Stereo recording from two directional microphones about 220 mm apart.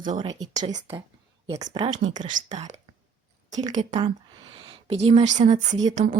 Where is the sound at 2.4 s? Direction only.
30° right (ahead or behind).